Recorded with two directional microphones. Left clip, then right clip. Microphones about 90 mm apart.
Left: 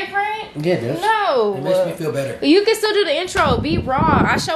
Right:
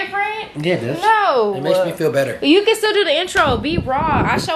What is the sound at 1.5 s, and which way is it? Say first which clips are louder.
Speech: right 1 dB; 20° right (ahead or behind).